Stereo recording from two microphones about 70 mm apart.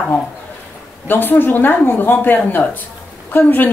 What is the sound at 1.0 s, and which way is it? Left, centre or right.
A woman's voice, left.